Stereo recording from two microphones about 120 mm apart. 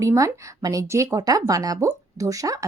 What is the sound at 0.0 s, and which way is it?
A woman's voice, 25° right (ahead or behind).